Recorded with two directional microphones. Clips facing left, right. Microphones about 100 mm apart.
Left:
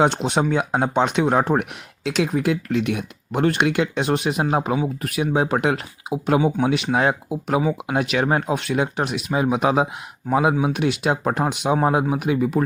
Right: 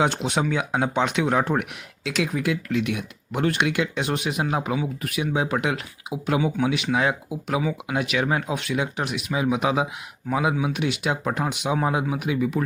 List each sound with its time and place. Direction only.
0.0 s speech: 35° left (ahead or behind)